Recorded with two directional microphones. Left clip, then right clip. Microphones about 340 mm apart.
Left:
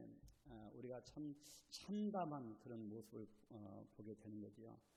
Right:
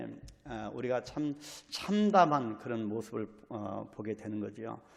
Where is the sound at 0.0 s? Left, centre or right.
Right.